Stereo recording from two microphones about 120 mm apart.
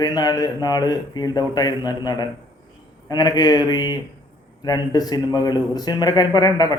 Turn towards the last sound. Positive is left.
turn(degrees=30)  # may be behind; listen again after turning